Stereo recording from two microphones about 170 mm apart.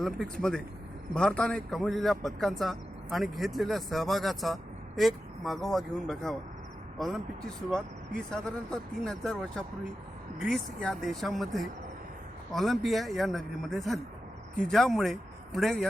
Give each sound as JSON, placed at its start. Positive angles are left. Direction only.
{"t": 1.1, "sound": "a man's voice", "side_deg": 5}
{"t": 7.7, "sound": "a man's voice", "side_deg": 5}